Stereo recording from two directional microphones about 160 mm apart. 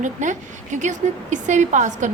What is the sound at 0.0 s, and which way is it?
A woman's voice, 50° right (ahead or behind).